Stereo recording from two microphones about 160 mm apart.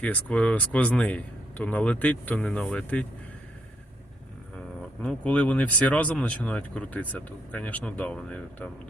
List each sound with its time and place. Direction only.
0.0 s speech: 10° left (ahead or behind)
5.0 s speech: 10° left (ahead or behind)